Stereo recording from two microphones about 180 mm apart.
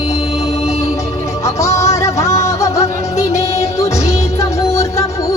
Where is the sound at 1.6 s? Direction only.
15° left (ahead or behind).